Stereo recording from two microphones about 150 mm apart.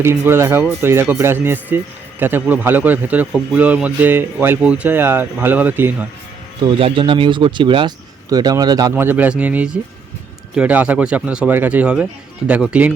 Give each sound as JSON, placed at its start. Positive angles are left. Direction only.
{"t": 0.0, "sound": "speech", "side_deg": -15}
{"t": 6.7, "sound": "speech", "side_deg": -35}
{"t": 9.0, "sound": "speech", "side_deg": -10}